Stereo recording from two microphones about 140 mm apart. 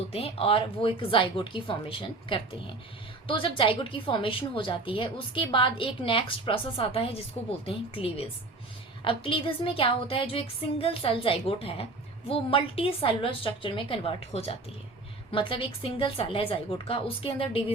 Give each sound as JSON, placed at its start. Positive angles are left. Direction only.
{"t": 0.1, "sound": "a woman's voice", "side_deg": 45}